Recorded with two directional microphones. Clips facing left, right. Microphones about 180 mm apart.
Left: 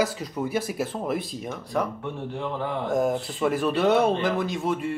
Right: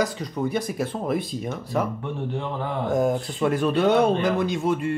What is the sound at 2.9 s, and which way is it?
Speech, centre (ahead or behind).